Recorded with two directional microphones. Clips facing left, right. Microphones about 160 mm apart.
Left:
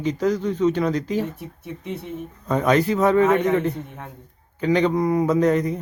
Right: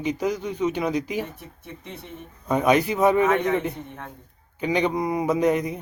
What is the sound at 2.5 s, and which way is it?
Speech, 15° right (ahead or behind).